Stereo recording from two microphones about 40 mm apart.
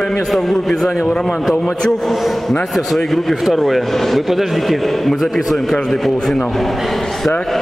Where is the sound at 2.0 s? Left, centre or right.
Centre.